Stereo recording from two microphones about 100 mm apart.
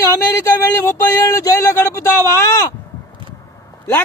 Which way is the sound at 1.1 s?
35° left (ahead or behind).